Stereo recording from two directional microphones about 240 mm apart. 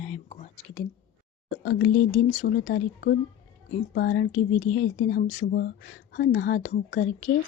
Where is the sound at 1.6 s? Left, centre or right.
Left.